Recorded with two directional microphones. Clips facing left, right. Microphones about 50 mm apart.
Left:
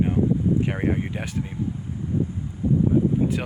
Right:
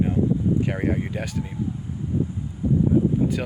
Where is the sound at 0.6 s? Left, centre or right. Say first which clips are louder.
Even; centre.